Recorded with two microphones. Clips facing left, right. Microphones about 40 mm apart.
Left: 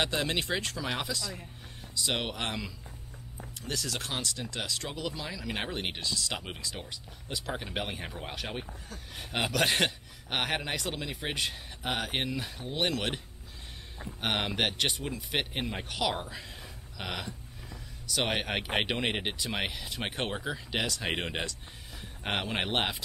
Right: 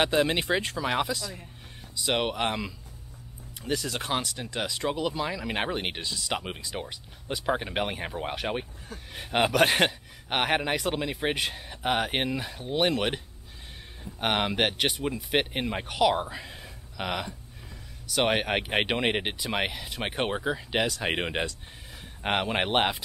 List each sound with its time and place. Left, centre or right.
0.0 s speech: centre
14.2 s speech: centre